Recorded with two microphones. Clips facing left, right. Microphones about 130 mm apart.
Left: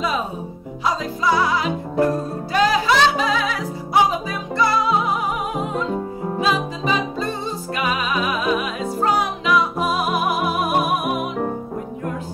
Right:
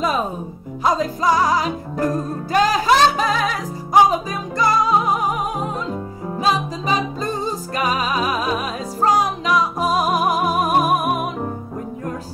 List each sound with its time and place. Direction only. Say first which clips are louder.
0.8 s music: right 3 dB; 45° right (ahead or behind)
6.4 s music: right 2 dB; 40° right (ahead or behind)